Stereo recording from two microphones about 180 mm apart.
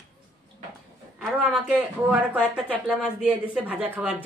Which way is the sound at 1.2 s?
5° right (ahead or behind).